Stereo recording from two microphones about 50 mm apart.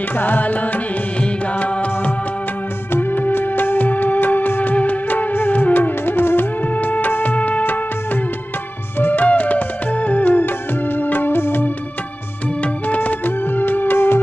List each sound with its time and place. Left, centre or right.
0.1 s music: left
2.9 s music: left
6.6 s music: left
12.6 s music: left